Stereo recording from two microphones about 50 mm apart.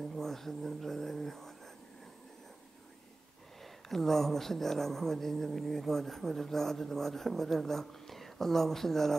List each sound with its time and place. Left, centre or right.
0.0 s speech: centre
3.6 s a woman's voice: centre